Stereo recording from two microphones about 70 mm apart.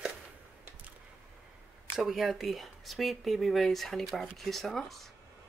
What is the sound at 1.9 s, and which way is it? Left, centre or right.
A woman's voice, centre.